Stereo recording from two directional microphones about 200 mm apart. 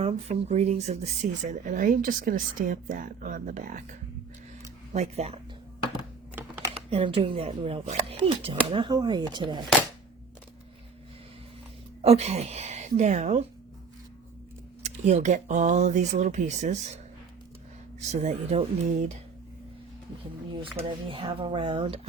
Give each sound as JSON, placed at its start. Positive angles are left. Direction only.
{"t": 0.0, "sound": "speech", "side_deg": -30}
{"t": 4.9, "sound": "speech", "side_deg": -30}
{"t": 6.9, "sound": "speech", "side_deg": -25}
{"t": 12.0, "sound": "speech", "side_deg": -30}
{"t": 14.8, "sound": "speech", "side_deg": -35}
{"t": 18.1, "sound": "speech", "side_deg": -35}
{"t": 20.8, "sound": "speech", "side_deg": -10}
{"t": 21.1, "sound": "speech", "side_deg": -25}